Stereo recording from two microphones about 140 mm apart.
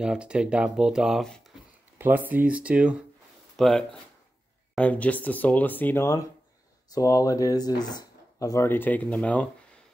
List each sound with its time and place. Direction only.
0.0 s speech: 5° right (ahead or behind)
2.0 s speech: 15° right (ahead or behind)
3.5 s speech: 5° left (ahead or behind)